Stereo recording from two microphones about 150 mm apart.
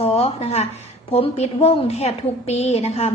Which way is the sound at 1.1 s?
45° left (ahead or behind).